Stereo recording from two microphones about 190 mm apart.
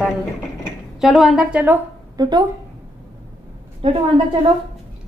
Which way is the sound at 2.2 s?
20° right (ahead or behind).